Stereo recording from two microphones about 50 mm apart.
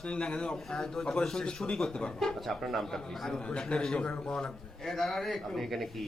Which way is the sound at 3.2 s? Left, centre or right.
Centre.